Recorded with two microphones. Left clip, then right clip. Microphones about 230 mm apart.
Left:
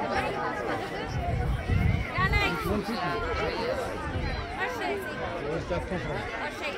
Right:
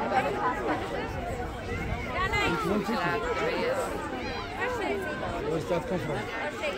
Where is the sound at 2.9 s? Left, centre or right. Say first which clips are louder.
Right 2 dB; right.